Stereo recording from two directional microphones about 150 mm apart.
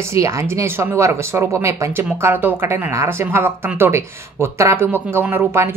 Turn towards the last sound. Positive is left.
turn(degrees=-15)  # may be behind; listen again after turning